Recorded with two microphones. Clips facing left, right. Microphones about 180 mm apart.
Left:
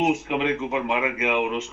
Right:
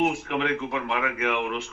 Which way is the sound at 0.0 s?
20° left (ahead or behind).